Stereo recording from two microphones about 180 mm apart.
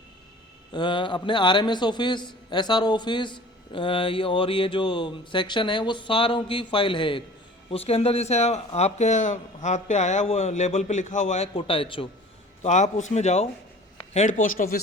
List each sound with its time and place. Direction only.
0.7 s a man's voice: 25° left (ahead or behind)
12.6 s speech: 40° left (ahead or behind)